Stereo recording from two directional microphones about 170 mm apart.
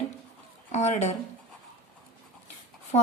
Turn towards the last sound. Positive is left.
turn(degrees=45)  # may be behind; listen again after turning